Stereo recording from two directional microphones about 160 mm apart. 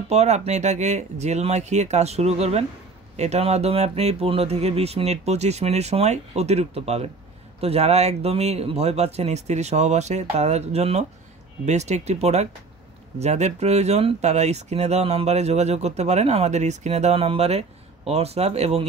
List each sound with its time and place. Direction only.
0.1 s speech: 45° right (ahead or behind)